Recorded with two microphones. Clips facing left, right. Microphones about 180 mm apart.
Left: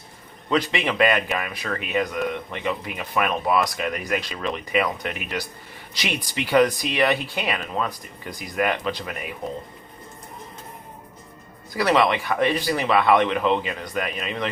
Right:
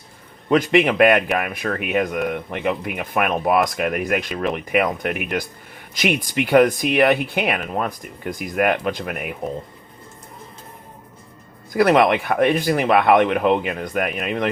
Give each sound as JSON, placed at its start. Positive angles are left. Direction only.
{"t": 0.5, "sound": "a man's voice", "side_deg": -50}
{"t": 11.7, "sound": "speech", "side_deg": -55}